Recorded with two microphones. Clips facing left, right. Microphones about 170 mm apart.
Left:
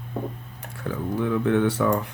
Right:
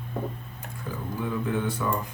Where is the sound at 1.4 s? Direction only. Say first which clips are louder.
Left 8 dB; 70° left (ahead or behind).